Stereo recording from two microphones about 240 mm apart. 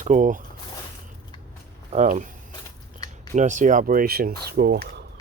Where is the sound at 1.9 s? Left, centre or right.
Right.